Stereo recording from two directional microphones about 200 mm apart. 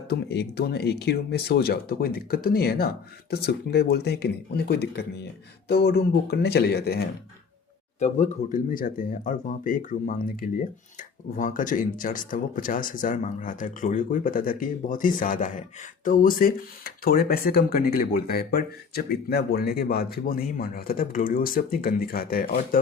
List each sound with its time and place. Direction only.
0.1 s speech: 55° left (ahead or behind)
7.9 s speech: 35° left (ahead or behind)